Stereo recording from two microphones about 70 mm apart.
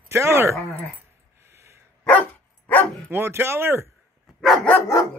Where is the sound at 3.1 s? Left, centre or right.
Right.